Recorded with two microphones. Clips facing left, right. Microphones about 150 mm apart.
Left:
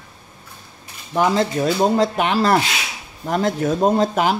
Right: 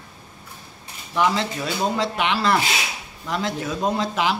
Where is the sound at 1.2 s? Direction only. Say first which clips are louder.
Left 4 dB; 40° left (ahead or behind).